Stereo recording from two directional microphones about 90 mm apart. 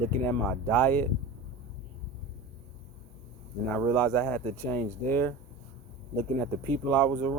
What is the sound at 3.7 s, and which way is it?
Speech, 20° left (ahead or behind).